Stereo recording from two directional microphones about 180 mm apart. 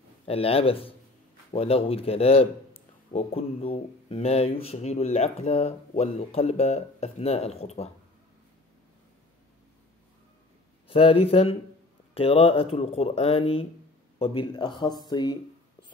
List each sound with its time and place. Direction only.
0.2 s a man's voice: 30° left (ahead or behind)
10.9 s a man's voice: 30° left (ahead or behind)